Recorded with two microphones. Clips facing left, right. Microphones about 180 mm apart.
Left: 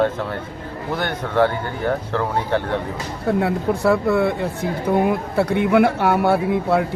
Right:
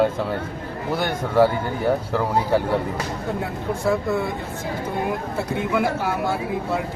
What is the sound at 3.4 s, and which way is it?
Speech, 65° left (ahead or behind).